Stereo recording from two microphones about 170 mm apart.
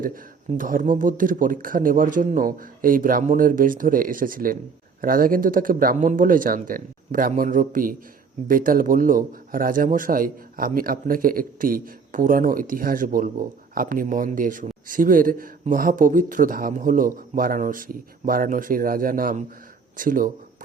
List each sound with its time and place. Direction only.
0.0 s a man's voice: 55° right (ahead or behind)